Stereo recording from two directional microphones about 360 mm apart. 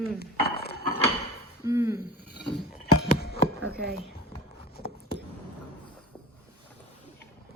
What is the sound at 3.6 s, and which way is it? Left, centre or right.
Speech, right.